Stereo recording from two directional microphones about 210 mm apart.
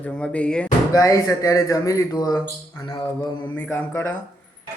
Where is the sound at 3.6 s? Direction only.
10° left (ahead or behind).